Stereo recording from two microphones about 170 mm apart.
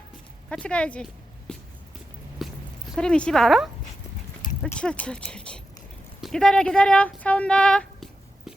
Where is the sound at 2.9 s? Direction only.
5° left (ahead or behind).